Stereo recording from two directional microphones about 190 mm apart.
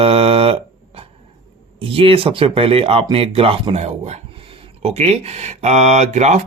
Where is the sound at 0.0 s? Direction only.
30° right (ahead or behind).